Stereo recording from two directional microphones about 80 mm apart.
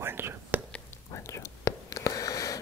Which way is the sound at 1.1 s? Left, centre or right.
Left.